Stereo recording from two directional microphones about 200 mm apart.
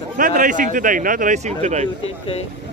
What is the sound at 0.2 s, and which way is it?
Speech, 40° right (ahead or behind).